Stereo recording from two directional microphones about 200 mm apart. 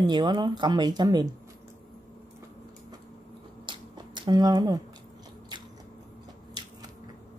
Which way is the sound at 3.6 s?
20° right (ahead or behind).